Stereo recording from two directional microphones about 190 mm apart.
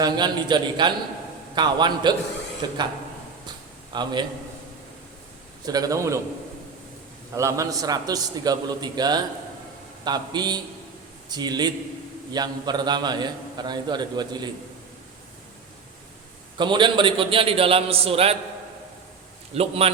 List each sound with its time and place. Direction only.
0.0 s a man's voice: 25° right (ahead or behind)
3.9 s a man's voice: 25° right (ahead or behind)
5.6 s a man's voice: 20° right (ahead or behind)
7.3 s a man's voice: 15° right (ahead or behind)
16.6 s a man's voice: 25° right (ahead or behind)
19.5 s a man's voice: 30° right (ahead or behind)